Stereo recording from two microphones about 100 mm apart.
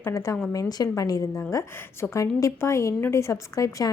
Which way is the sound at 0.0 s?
30° left (ahead or behind).